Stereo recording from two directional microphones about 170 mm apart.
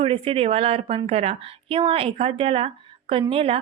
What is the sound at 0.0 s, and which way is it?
A woman's voice, 35° right (ahead or behind).